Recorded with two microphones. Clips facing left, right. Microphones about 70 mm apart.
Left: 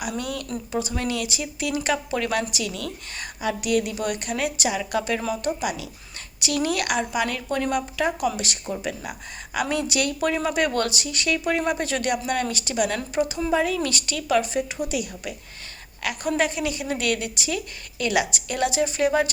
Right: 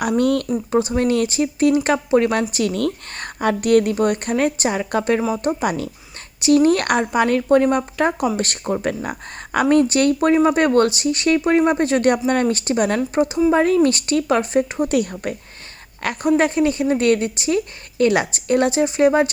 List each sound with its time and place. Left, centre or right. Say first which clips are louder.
0.1 s speech: right 12 dB; right
0.7 s speech: right 9 dB; right
2.5 s speech: right 10 dB; right
6.4 s speech: right 10 dB; right
14.8 s speech: right 9 dB; right